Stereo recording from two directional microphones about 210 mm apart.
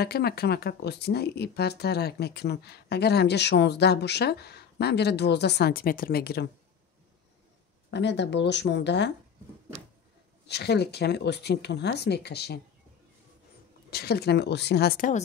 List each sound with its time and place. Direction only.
0.0 s speech: 50° left (ahead or behind)
7.9 s speech: 55° left (ahead or behind)
10.4 s speech: 50° left (ahead or behind)
13.8 s speech: 50° left (ahead or behind)